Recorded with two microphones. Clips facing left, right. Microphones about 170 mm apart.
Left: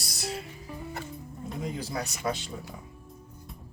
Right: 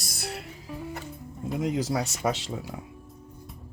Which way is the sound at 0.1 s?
60° right (ahead or behind).